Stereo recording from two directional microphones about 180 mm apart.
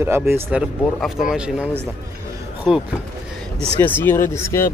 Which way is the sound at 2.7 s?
5° right (ahead or behind).